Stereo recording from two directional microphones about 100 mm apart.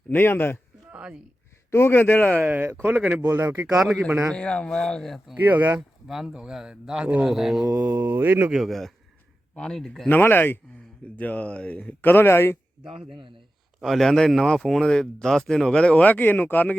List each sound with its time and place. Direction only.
0.1 s a man's voice: 20° left (ahead or behind)
0.9 s a sound: 10° right (ahead or behind)
1.7 s a man's voice: 25° left (ahead or behind)
2.4 s speech: 20° right (ahead or behind)
3.4 s speech: 30° right (ahead or behind)
3.7 s speech: 5° right (ahead or behind)
4.3 s speech: 10° left (ahead or behind)
5.4 s speech: 15° right (ahead or behind)
6.1 s a man's voice: 5° right (ahead or behind)
8.0 s speech: 20° right (ahead or behind)
8.5 s a man's voice: centre (ahead or behind)
10.1 s a man's voice: 20° left (ahead or behind)
13.8 s speech: centre (ahead or behind)